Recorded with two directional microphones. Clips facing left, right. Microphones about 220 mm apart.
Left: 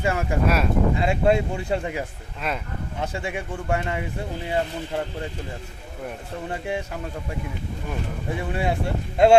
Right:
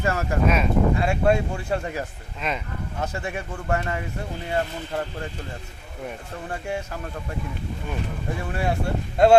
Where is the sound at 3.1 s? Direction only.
15° left (ahead or behind).